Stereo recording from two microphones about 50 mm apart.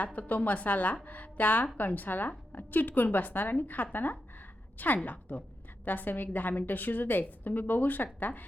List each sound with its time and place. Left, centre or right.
0.0 s a woman's voice: left
3.9 s a sound: left
5.0 s a woman's voice: left